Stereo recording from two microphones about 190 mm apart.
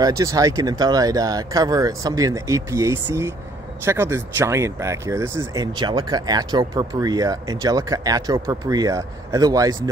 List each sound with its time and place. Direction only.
0.0 s speech: 20° right (ahead or behind)